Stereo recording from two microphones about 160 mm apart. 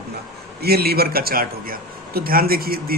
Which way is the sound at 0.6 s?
80° right.